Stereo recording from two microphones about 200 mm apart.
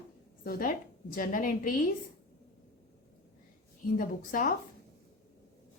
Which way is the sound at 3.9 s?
45° left (ahead or behind).